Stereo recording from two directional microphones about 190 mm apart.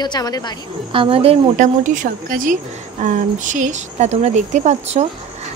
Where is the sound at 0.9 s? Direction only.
30° right (ahead or behind).